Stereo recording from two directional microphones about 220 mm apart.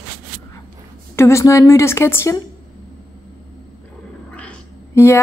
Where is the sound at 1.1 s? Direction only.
10° left (ahead or behind).